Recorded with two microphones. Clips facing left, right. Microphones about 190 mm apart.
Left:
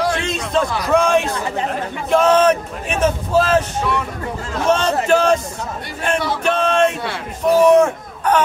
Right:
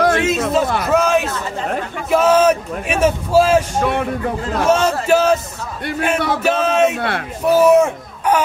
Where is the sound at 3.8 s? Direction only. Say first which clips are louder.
Right 3 dB; 55° right (ahead or behind).